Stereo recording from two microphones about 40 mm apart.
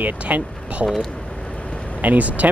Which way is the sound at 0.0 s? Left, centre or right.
Right.